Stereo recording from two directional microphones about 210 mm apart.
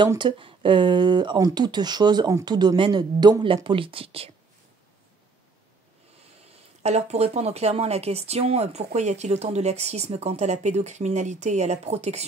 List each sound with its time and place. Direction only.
0.0 s speech: 20° right (ahead or behind)
6.8 s a woman's voice: 30° right (ahead or behind)